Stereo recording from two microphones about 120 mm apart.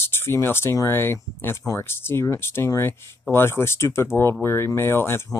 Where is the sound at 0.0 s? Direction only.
20° left (ahead or behind).